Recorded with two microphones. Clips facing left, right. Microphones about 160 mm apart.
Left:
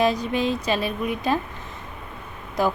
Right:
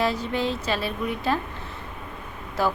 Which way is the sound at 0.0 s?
15° left (ahead or behind).